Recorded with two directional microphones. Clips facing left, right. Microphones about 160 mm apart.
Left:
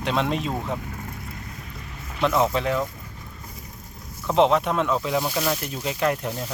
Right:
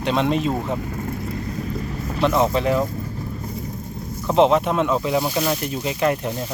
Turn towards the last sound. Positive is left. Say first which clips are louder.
# right 3 dB
turn(degrees=-5)  # may be behind; listen again after turning